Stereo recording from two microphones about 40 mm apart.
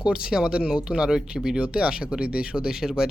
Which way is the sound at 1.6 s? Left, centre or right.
Right.